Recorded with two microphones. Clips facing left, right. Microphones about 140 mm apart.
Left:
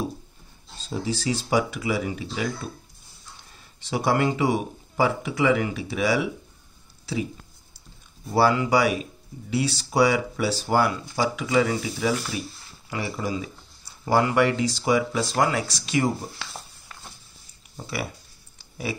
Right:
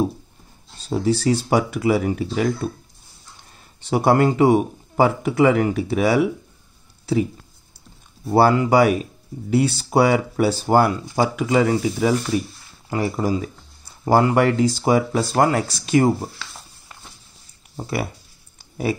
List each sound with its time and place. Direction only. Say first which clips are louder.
0.8 s speech: right 8 dB; 60° right (ahead or behind)
3.9 s speech: right 6 dB; 50° right (ahead or behind)
8.3 s speech: right 5 dB; 50° right (ahead or behind)
17.7 s speech: right 6 dB; 45° right (ahead or behind)